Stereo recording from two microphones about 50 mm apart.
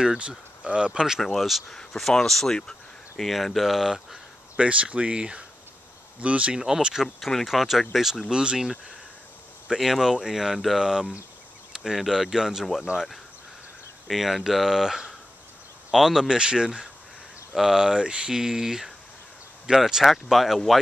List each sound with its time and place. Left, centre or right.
0.0 s speech: centre
1.2 s speech: centre
4.6 s speech: right
6.5 s speech: centre
7.2 s speech: centre
9.8 s speech: centre
14.0 s speech: centre